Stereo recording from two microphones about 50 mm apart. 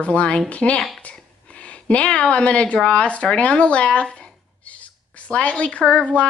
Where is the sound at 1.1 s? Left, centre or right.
Left.